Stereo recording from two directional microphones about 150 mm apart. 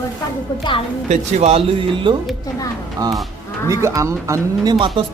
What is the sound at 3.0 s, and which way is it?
Speech, 25° right (ahead or behind).